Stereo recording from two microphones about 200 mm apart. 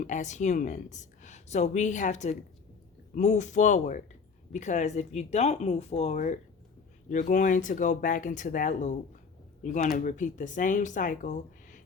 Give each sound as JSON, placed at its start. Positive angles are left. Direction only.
{"t": 0.0, "sound": "speech", "side_deg": 40}